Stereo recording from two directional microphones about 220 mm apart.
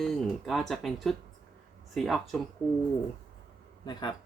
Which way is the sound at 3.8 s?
20° left (ahead or behind).